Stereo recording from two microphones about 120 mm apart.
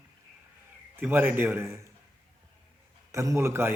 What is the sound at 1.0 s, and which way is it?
Speech, 15° right (ahead or behind).